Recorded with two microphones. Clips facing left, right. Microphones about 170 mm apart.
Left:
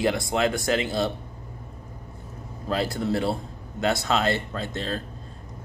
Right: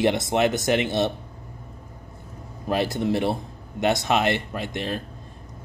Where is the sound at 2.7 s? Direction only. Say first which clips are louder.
Right 2 dB; 20° right (ahead or behind).